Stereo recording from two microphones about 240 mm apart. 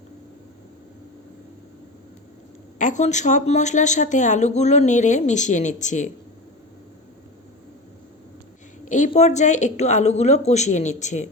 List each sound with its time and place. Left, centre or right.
2.7 s a woman's voice: left
8.8 s a woman's voice: left